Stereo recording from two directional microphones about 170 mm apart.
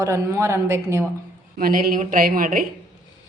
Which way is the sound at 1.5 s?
55° right (ahead or behind).